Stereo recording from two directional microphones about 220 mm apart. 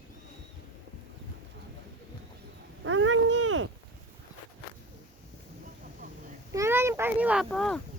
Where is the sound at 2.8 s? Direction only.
60° right (ahead or behind).